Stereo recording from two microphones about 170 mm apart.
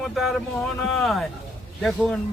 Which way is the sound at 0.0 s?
Centre (ahead or behind).